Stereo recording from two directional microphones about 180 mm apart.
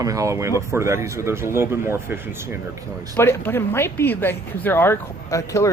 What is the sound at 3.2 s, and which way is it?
Speech, 10° left (ahead or behind).